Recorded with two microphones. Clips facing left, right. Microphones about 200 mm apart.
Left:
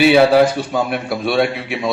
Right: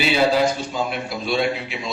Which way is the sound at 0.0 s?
60° left (ahead or behind).